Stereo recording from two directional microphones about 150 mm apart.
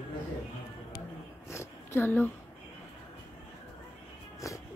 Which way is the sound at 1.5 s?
15° left (ahead or behind).